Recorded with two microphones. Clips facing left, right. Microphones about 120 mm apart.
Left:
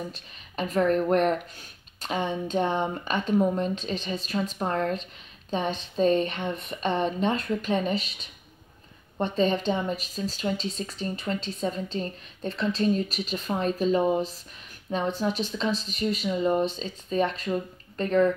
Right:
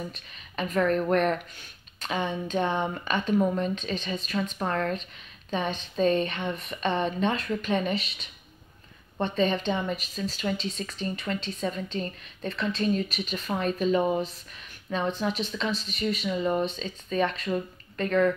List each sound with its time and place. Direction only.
0.1 s a woman's voice: 35° left (ahead or behind)
15.1 s a woman's voice: 35° left (ahead or behind)